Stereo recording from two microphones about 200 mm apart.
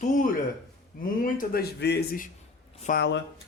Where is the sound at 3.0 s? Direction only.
60° left (ahead or behind).